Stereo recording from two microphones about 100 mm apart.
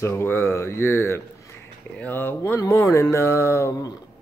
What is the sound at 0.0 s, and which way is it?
Speech, 25° left (ahead or behind).